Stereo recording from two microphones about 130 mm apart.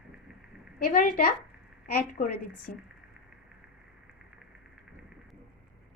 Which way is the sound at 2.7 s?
90° left.